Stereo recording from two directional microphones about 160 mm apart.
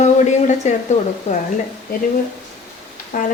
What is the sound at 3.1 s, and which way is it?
Speech, 55° left (ahead or behind).